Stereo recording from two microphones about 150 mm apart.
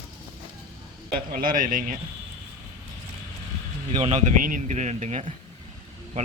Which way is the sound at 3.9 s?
50° right (ahead or behind).